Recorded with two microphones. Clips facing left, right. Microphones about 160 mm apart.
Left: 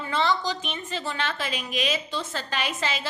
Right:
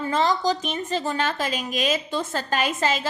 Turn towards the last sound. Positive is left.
turn(degrees=-45)  # may be behind; listen again after turning